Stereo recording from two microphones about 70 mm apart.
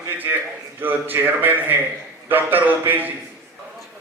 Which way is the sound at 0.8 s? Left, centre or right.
Right.